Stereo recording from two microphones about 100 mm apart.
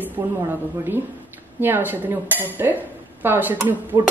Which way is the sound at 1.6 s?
20° right (ahead or behind).